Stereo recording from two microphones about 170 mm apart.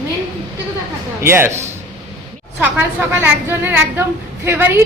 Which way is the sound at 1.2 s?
15° right (ahead or behind).